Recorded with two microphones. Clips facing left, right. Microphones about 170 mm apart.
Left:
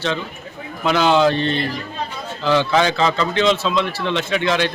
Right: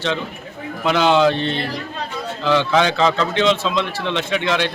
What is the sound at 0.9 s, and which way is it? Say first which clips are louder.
A man's voice: even; 5° left (ahead or behind).